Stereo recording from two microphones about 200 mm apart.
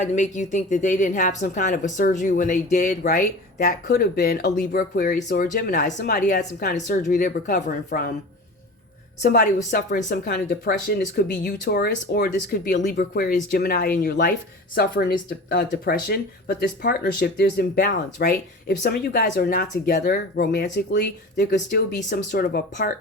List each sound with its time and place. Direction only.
0.0 s speech: 35° left (ahead or behind)
3.8 s speech: 50° left (ahead or behind)
6.9 s speech: 40° left (ahead or behind)
9.6 s speech: 40° left (ahead or behind)
14.8 s speech: 55° left (ahead or behind)